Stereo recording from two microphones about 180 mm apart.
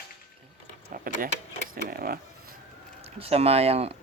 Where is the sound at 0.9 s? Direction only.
50° right (ahead or behind).